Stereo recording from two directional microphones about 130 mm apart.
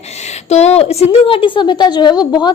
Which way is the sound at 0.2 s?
60° left (ahead or behind).